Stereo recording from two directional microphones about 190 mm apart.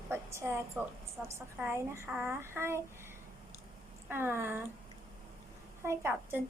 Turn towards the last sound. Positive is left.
turn(degrees=-10)  # may be behind; listen again after turning